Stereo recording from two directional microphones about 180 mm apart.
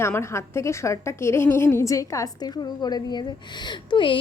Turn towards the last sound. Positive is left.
turn(degrees=25)  # may be behind; listen again after turning